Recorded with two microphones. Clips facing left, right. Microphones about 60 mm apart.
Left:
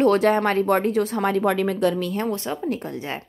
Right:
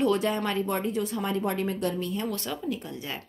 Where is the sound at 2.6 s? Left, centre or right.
Left.